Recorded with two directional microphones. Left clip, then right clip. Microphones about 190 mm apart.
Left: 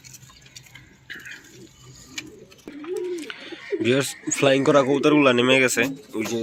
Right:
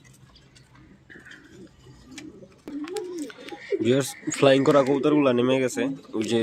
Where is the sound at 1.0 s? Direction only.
10° right (ahead or behind).